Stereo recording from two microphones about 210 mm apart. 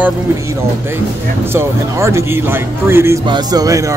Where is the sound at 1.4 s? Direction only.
10° right (ahead or behind).